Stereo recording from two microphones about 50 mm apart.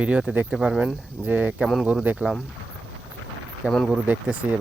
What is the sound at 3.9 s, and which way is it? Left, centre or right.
Speech, right.